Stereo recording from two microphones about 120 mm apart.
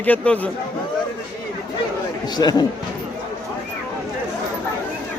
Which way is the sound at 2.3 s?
35° left (ahead or behind).